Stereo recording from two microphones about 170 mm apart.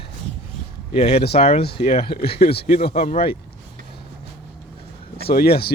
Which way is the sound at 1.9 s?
65° left (ahead or behind).